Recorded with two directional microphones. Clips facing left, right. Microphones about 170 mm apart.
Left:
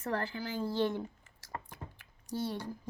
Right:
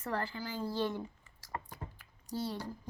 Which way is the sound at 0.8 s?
55° left (ahead or behind).